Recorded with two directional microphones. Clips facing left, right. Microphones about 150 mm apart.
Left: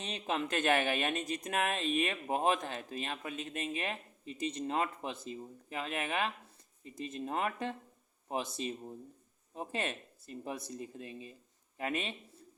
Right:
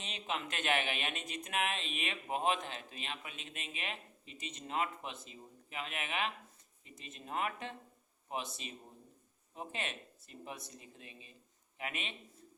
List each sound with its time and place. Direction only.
0.0 s speech: 40° left (ahead or behind)